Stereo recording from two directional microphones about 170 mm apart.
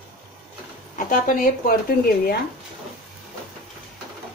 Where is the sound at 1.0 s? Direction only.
50° left (ahead or behind).